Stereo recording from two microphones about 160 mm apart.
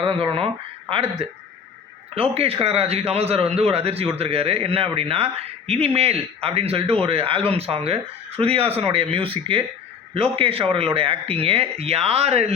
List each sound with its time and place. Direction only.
0.0 s speech: 35° right (ahead or behind)